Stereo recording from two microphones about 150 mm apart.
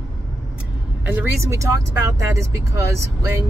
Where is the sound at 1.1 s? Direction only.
20° right (ahead or behind).